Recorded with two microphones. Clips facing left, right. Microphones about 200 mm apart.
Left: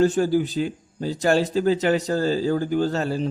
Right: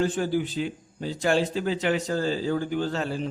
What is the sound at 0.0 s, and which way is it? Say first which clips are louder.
A man's voice: left 6 dB; 40° left (ahead or behind).